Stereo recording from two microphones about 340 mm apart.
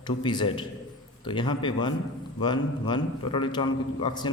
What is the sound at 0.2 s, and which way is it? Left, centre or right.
A man's voice, centre.